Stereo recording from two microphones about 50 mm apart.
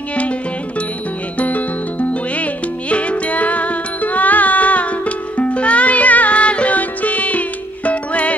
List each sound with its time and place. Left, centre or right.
0.1 s music: left